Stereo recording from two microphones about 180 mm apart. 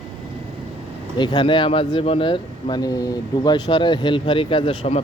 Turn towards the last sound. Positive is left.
turn(degrees=30)  # may be behind; listen again after turning